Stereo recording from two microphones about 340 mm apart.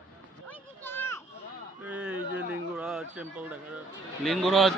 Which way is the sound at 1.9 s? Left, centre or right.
Centre.